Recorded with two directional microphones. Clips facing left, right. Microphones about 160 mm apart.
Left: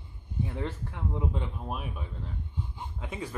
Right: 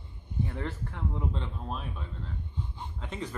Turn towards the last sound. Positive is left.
turn(degrees=10)  # may be behind; listen again after turning